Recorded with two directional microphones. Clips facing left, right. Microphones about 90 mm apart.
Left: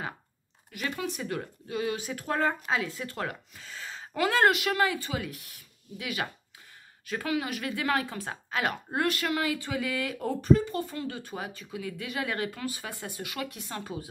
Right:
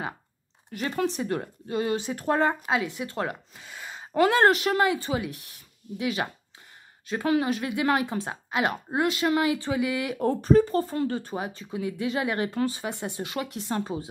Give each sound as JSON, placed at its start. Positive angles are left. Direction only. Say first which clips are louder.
{"t": 0.7, "sound": "speech", "louder": "right 6 dB", "side_deg": -35}
{"t": 4.3, "sound": "speech", "louder": "right 1 dB", "side_deg": -25}
{"t": 10.2, "sound": "speech", "louder": "right 4 dB", "side_deg": -40}